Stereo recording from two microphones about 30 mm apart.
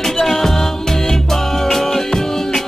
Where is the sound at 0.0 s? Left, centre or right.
Centre.